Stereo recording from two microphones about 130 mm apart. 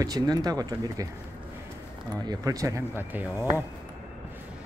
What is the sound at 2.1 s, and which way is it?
Speech, 30° right (ahead or behind).